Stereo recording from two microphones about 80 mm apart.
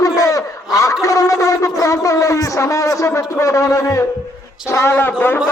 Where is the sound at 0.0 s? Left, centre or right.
Left.